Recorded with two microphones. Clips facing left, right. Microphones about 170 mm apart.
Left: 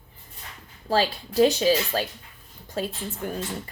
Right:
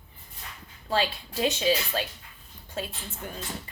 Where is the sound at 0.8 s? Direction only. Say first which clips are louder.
Left 4 dB; 35° left (ahead or behind).